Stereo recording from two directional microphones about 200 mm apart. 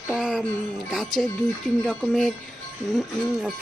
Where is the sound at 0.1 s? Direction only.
Centre (ahead or behind).